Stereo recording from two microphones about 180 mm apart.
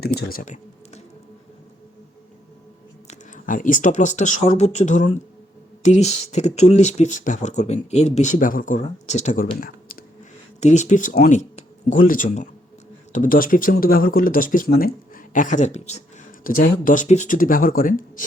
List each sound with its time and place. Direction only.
0.0 s speech: 60° left (ahead or behind); by 1.0 s 40° left (ahead or behind)
3.1 s speech: 45° left (ahead or behind)
10.6 s speech: 40° left (ahead or behind)